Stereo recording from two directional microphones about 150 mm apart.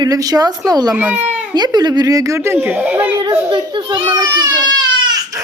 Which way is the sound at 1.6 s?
30° right (ahead or behind).